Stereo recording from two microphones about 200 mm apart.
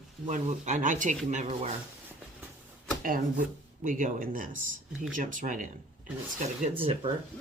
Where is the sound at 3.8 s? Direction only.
40° right (ahead or behind).